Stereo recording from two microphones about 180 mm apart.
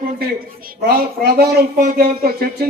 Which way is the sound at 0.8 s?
60° right (ahead or behind).